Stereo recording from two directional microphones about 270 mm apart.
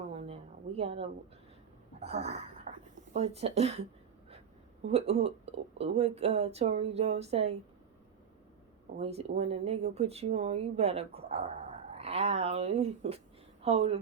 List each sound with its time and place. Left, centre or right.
0.1 s a sound: right
0.8 s speech: right
2.7 s a sound: right
3.1 s speech: right
4.9 s speech: right
9.0 s a woman's voice: right